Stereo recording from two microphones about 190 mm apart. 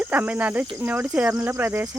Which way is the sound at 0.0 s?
10° right (ahead or behind).